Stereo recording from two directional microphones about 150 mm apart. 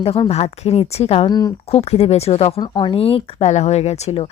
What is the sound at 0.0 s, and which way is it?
Speech, 40° left (ahead or behind).